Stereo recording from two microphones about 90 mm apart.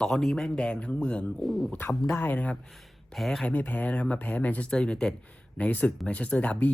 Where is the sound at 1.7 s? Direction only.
20° left (ahead or behind).